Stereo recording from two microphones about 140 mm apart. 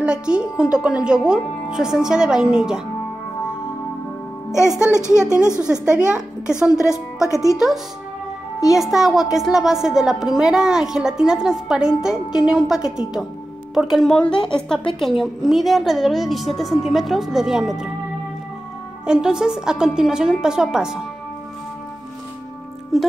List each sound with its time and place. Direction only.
0.0 s a woman's voice: 5° right (ahead or behind)
4.8 s speech: 20° left (ahead or behind)
5.6 s a child's voice: 5° right (ahead or behind)
6.8 s speech: 20° left (ahead or behind)
7.5 s a woman's voice: centre (ahead or behind)
19.0 s a woman's voice: 5° right (ahead or behind)
22.9 s a woman's voice: centre (ahead or behind)